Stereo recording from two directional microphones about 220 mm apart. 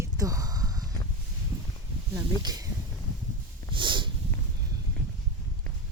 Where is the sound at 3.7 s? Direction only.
20° right (ahead or behind).